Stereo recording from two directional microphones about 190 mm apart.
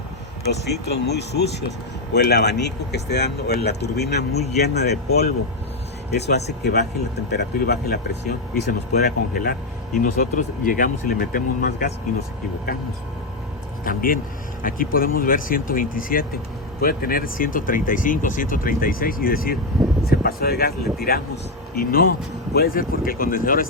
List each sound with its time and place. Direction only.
0.5 s speech: 60° left (ahead or behind)
13.8 s speech: 50° left (ahead or behind)